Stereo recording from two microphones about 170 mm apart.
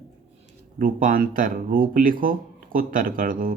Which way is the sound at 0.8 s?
55° right (ahead or behind).